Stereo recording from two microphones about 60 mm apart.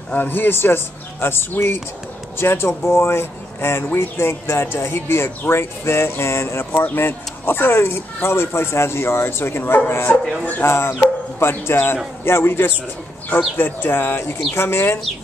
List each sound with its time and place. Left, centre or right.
0.1 s speech: left
10.6 s speech: left